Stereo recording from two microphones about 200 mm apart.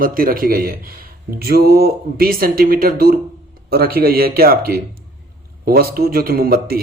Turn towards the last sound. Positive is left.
turn(degrees=-50)  # may be behind; listen again after turning